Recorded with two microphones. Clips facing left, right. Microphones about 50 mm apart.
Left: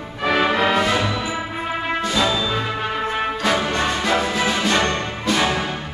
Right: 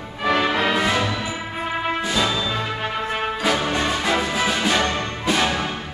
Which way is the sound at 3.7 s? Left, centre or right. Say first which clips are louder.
Left 1 dB; centre.